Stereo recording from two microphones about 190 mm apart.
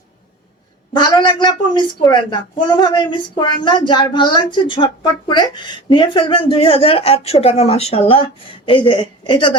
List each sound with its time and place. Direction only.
0.9 s a woman's voice: 20° left (ahead or behind)